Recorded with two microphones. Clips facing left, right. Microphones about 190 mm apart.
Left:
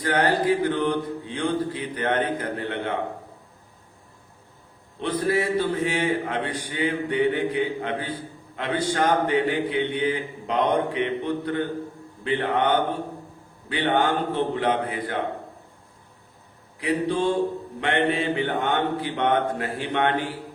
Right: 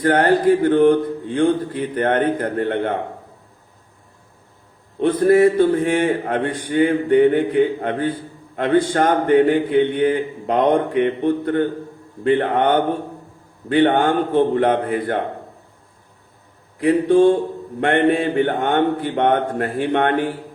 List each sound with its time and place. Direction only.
0.0 s a man's voice: 50° right (ahead or behind)
4.9 s a man's voice: 50° right (ahead or behind)
16.8 s a man's voice: 50° right (ahead or behind)